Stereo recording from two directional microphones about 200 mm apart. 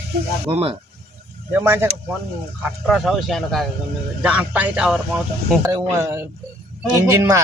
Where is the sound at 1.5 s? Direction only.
10° right (ahead or behind).